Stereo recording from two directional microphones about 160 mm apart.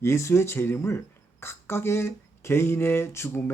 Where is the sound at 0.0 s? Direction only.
15° left (ahead or behind).